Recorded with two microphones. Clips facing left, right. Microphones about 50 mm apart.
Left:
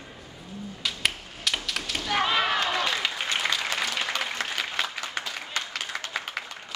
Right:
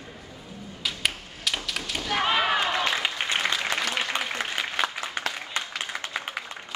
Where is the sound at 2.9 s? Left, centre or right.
Centre.